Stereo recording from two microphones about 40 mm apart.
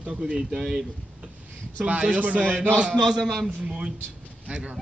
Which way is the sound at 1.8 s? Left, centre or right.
Right.